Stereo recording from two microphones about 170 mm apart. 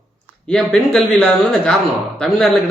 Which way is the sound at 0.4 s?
5° left (ahead or behind).